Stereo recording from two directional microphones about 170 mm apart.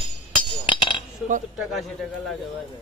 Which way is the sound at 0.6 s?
30° left (ahead or behind).